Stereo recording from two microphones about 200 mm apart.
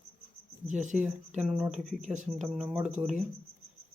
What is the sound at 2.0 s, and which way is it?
Speech, 35° right (ahead or behind).